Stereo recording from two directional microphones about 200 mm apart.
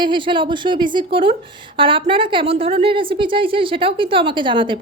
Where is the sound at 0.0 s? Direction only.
25° right (ahead or behind).